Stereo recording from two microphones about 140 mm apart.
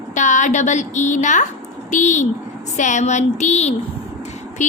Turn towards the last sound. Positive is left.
turn(degrees=60)  # may be behind; listen again after turning